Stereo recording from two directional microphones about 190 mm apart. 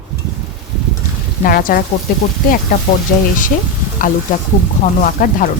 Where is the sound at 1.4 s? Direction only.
50° left (ahead or behind).